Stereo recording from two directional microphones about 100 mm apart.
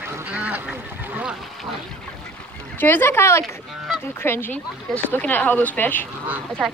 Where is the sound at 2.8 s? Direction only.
20° left (ahead or behind).